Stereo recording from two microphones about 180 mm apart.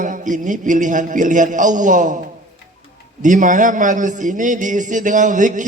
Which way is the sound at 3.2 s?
45° right (ahead or behind).